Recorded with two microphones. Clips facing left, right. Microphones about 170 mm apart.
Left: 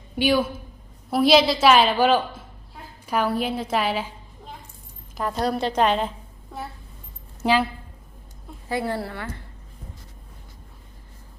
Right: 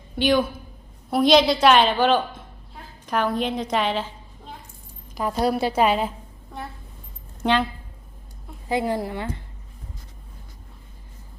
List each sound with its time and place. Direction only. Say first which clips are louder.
0.2 s a woman's voice: right 1 dB; 5° left (ahead or behind)
5.1 s a woman's voice: right 2 dB; centre (ahead or behind)
8.7 s a woman's voice: right 3 dB; 15° right (ahead or behind)